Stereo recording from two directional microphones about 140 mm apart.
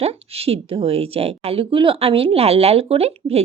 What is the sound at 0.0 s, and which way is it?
A woman's voice, 45° right (ahead or behind).